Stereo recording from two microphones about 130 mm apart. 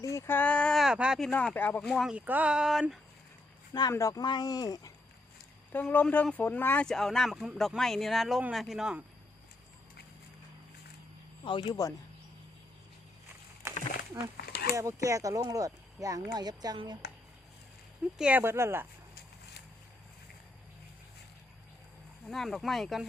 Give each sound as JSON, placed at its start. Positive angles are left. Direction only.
{"t": 0.0, "sound": "speech", "side_deg": 20}
{"t": 1.2, "sound": "speech", "side_deg": 10}
{"t": 2.1, "sound": "speech", "side_deg": -10}
{"t": 3.8, "sound": "speech", "side_deg": 25}
{"t": 5.7, "sound": "speech", "side_deg": 15}
{"t": 6.8, "sound": "speech", "side_deg": 5}
{"t": 11.4, "sound": "speech", "side_deg": 40}
{"t": 14.8, "sound": "speech", "side_deg": -25}
{"t": 18.2, "sound": "speech", "side_deg": -10}
{"t": 22.3, "sound": "speech", "side_deg": 0}